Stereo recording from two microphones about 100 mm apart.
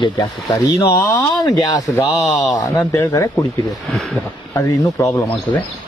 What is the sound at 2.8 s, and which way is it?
Speech, 30° left (ahead or behind).